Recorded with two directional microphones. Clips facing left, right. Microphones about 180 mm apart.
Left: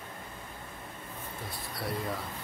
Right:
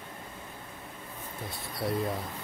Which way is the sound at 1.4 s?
25° right (ahead or behind).